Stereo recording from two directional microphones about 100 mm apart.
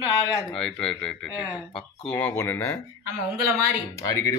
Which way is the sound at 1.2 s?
35° left (ahead or behind).